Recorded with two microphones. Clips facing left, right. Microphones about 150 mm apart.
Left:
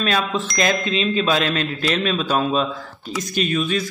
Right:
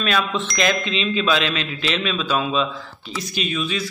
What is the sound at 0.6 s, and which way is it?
Speech, 40° left (ahead or behind).